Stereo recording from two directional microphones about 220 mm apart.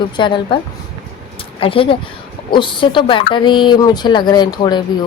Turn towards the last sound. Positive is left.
turn(degrees=20)  # may be behind; listen again after turning